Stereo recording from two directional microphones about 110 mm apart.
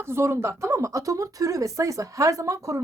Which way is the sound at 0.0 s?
20° right (ahead or behind).